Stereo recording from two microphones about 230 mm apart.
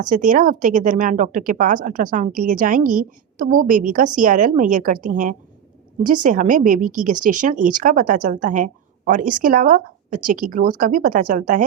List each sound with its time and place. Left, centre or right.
0.0 s a woman's voice: right